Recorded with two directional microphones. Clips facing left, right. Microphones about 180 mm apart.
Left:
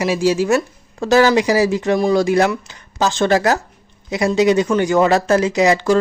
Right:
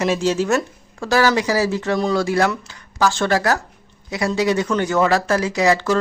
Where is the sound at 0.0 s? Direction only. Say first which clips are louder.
Left 2 dB; 10° left (ahead or behind).